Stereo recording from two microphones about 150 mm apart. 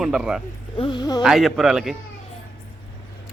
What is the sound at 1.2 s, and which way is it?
Speech, centre (ahead or behind).